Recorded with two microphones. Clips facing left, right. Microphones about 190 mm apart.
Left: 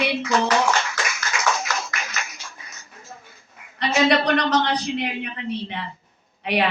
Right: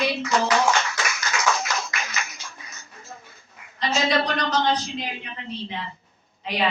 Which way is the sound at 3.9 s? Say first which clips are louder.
Left 5 dB; 65° left (ahead or behind).